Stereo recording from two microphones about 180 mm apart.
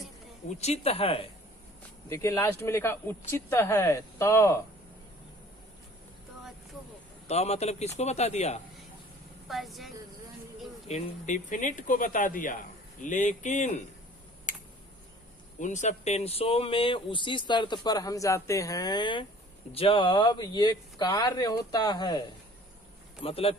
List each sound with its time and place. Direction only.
0.6 s speech: 35° left (ahead or behind)
2.0 s speech: 15° left (ahead or behind)
7.3 s speech: 35° left (ahead or behind)
9.5 s a woman's voice: centre (ahead or behind)
10.8 s speech: 40° left (ahead or behind)
14.5 s a sound: 45° left (ahead or behind)
15.5 s speech: 45° left (ahead or behind); by 22.2 s 25° left (ahead or behind)
23.2 s speech: 30° left (ahead or behind)